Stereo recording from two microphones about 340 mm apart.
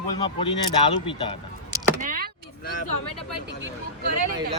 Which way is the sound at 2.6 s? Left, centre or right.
Left.